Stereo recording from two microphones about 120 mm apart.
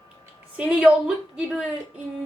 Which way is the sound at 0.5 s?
10° right (ahead or behind).